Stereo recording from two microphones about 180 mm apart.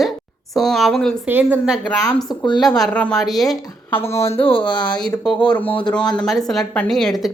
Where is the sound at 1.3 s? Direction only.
10° right (ahead or behind).